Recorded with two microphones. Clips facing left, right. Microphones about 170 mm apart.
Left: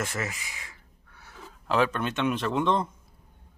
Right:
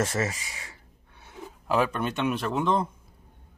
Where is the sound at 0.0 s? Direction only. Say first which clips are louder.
Right 5 dB; 30° right (ahead or behind).